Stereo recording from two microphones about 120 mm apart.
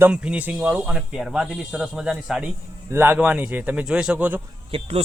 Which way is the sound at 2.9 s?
15° right (ahead or behind).